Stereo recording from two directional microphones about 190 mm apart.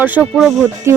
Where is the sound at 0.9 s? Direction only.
15° right (ahead or behind).